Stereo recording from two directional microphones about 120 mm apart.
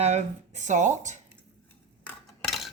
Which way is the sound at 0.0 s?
70° right (ahead or behind).